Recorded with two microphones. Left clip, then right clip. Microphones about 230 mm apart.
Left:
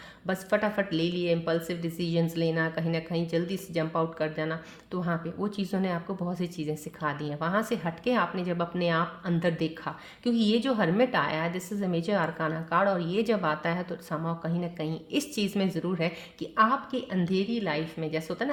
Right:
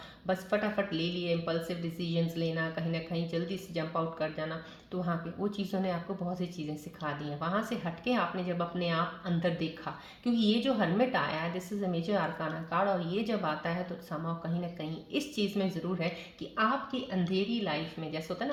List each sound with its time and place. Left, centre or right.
0.3 s speech: left
7.0 s speech: left